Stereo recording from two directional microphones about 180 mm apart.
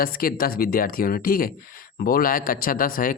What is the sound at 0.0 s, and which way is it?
A man's voice, 55° left (ahead or behind).